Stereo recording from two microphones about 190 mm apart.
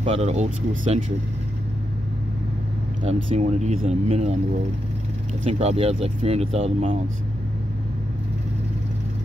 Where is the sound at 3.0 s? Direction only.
35° right (ahead or behind).